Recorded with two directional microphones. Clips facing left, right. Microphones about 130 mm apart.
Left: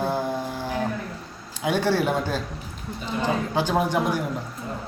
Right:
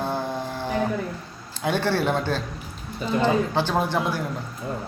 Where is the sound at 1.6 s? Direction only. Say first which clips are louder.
Left 1 dB; 10° left (ahead or behind).